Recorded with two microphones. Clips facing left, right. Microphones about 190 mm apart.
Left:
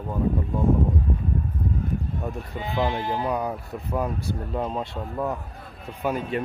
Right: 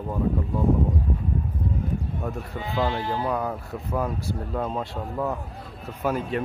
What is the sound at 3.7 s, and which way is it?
A man's voice, centre (ahead or behind).